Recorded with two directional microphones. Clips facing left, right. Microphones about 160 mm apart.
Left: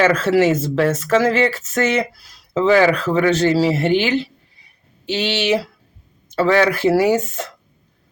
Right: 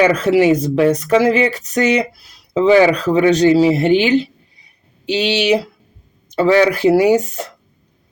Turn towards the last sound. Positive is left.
turn(degrees=-15)  # may be behind; listen again after turning